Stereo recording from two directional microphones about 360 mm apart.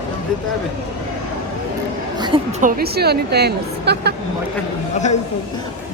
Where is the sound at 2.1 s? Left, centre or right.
Centre.